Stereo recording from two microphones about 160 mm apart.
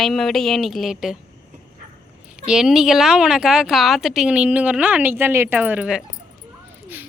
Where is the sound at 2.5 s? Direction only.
5° right (ahead or behind).